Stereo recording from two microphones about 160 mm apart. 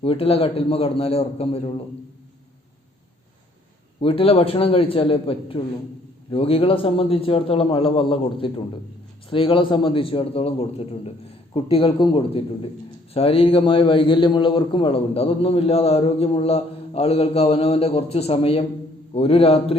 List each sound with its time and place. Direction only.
0.0 s a man's voice: 35° left (ahead or behind)
4.0 s a man's voice: 35° left (ahead or behind)